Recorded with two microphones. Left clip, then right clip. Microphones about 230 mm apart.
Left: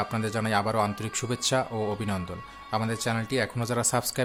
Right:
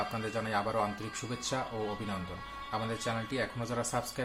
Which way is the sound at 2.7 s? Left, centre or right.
Left.